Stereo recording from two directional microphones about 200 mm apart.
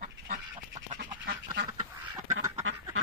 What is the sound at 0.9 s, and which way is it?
Duck, 50° right (ahead or behind).